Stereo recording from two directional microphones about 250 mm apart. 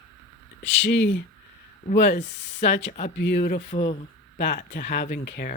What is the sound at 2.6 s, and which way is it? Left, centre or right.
Speech, left.